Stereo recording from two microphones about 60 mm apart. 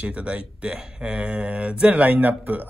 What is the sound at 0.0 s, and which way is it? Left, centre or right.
A man's voice, right.